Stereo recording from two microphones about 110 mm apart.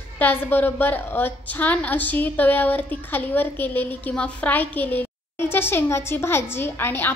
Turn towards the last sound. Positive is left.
turn(degrees=20)  # may be behind; listen again after turning